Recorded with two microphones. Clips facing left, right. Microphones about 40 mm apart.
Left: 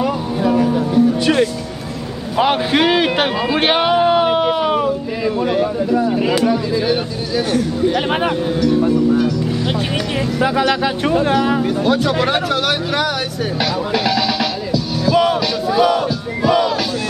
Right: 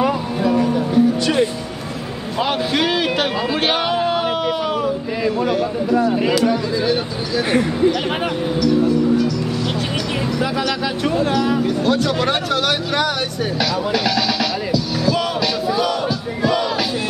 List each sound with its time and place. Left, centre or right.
0.6 s music: centre
2.3 s a sound: left
3.5 s music: left
6.0 s speech: centre
7.9 s speech: left
10.4 s speech: left
11.8 s speech: centre
13.6 s music: centre
15.7 s battle cry: centre